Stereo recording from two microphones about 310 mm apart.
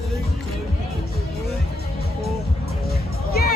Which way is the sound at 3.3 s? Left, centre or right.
Left.